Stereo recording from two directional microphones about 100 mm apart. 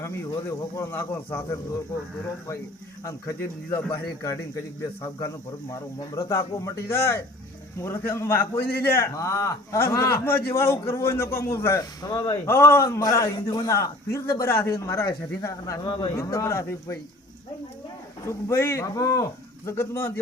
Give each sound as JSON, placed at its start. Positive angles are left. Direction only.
{"t": 0.0, "sound": "a man's voice", "side_deg": 25}
{"t": 3.0, "sound": "a man's voice", "side_deg": 30}
{"t": 5.6, "sound": "a man's voice", "side_deg": 35}
{"t": 11.8, "sound": "a man's voice", "side_deg": 40}
{"t": 12.3, "sound": "a man's voice", "side_deg": 25}
{"t": 15.8, "sound": "a man's voice", "side_deg": 55}
{"t": 16.1, "sound": "a man's voice", "side_deg": 30}
{"t": 18.3, "sound": "a man's voice", "side_deg": 25}
{"t": 19.7, "sound": "a man's voice", "side_deg": 25}